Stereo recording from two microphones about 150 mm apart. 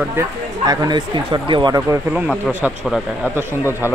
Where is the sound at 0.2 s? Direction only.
15° right (ahead or behind).